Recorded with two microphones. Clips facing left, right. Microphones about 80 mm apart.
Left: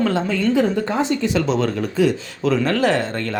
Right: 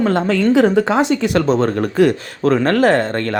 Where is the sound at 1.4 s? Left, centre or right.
Right.